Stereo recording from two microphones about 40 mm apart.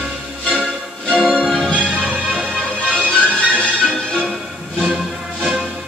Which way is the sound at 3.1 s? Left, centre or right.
Left.